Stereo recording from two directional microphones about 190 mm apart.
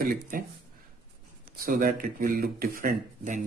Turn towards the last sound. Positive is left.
turn(degrees=-45)  # may be behind; listen again after turning